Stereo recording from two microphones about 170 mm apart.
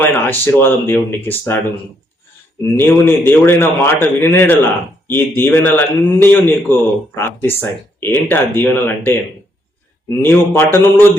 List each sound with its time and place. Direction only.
0.0 s a man's voice: 15° left (ahead or behind)
2.7 s a man's voice: 15° left (ahead or behind)
10.2 s a man's voice: 15° left (ahead or behind)